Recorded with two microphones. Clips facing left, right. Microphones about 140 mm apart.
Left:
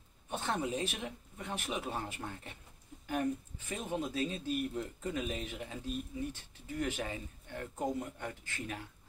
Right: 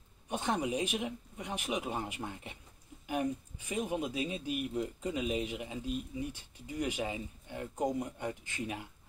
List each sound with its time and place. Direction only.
0.3 s speech: 15° right (ahead or behind)